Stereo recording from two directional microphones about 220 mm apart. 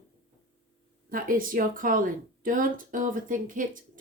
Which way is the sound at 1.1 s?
40° right (ahead or behind).